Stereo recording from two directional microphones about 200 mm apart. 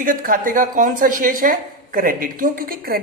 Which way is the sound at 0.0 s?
45° right (ahead or behind).